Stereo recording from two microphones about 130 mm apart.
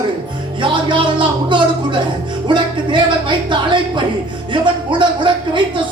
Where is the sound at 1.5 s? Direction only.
40° right (ahead or behind).